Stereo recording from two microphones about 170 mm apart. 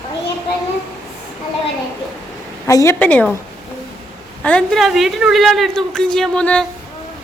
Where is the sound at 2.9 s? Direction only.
10° left (ahead or behind).